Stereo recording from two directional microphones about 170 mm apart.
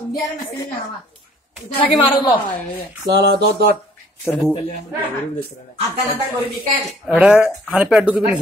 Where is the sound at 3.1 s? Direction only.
75° right (ahead or behind).